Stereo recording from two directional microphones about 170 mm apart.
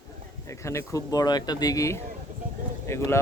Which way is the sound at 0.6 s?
15° left (ahead or behind).